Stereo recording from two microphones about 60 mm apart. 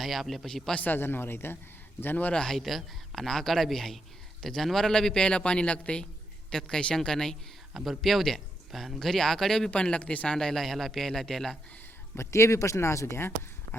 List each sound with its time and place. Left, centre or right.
0.0 s a man's voice: centre
0.8 s speech: left
2.3 s a man's voice: centre
2.6 s a man's voice: centre
9.7 s speech: left
10.3 s speech: centre
12.1 s speech: left